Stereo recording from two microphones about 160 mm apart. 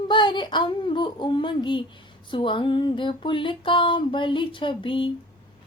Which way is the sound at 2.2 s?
30° left (ahead or behind).